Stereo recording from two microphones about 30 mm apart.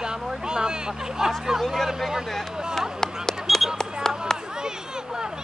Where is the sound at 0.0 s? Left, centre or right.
Right.